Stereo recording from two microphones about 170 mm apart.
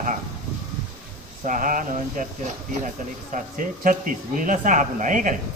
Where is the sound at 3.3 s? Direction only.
50° right (ahead or behind).